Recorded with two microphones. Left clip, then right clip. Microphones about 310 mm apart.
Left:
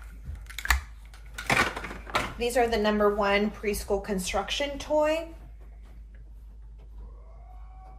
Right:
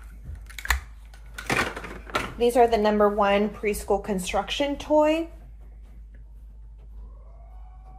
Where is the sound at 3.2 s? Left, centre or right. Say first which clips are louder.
Right 3 dB; centre.